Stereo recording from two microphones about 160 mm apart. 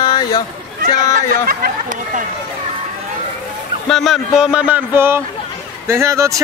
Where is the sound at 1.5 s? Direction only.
60° right (ahead or behind).